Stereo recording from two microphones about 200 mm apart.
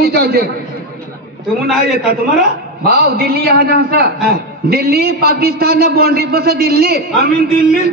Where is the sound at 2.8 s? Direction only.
50° right (ahead or behind).